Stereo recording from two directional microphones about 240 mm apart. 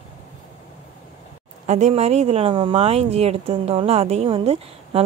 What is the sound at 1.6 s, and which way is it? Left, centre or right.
Speech, right.